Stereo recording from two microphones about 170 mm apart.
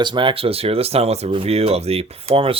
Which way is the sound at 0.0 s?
30° right (ahead or behind).